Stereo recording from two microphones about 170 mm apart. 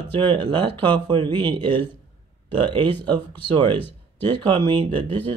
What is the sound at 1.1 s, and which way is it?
Speech, 30° right (ahead or behind).